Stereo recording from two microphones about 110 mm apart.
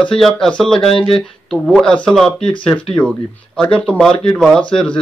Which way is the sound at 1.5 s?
5° left (ahead or behind).